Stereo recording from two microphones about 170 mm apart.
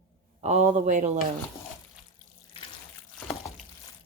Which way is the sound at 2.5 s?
30° left (ahead or behind).